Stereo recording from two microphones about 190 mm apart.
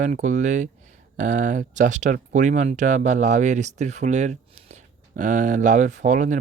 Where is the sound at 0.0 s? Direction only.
40° right (ahead or behind).